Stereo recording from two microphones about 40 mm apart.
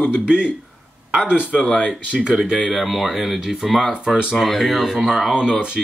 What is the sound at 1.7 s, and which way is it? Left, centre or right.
Speech, left.